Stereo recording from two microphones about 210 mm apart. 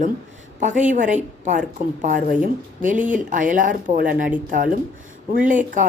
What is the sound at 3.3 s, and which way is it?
A woman's voice, 40° right (ahead or behind).